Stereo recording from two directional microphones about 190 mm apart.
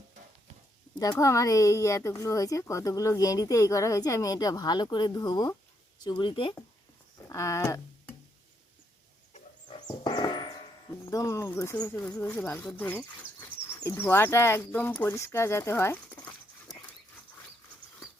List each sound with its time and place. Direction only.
1.2 s speech: 15° left (ahead or behind)
9.7 s speech: 20° left (ahead or behind)